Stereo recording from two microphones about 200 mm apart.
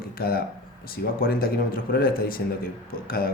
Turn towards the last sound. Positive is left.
turn(degrees=45)  # may be behind; listen again after turning